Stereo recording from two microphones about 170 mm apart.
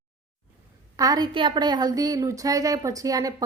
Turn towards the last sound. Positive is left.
turn(degrees=-20)  # may be behind; listen again after turning